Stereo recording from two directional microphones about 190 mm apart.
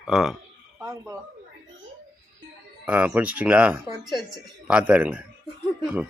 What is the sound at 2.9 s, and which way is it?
Speech, 10° right (ahead or behind).